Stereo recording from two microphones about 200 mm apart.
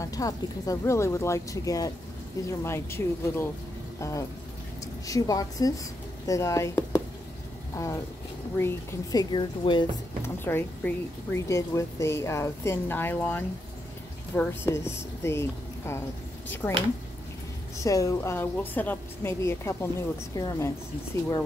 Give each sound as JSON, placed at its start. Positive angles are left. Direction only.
{"t": 0.0, "sound": "a woman's voice", "side_deg": 15}
{"t": 9.3, "sound": "a woman's voice", "side_deg": 25}
{"t": 10.2, "sound": "a woman's voice", "side_deg": 10}
{"t": 16.6, "sound": "a woman's voice", "side_deg": 5}